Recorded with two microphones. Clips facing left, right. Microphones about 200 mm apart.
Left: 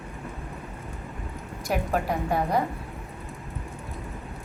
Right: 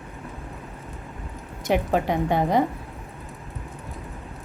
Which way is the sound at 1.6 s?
20° right (ahead or behind).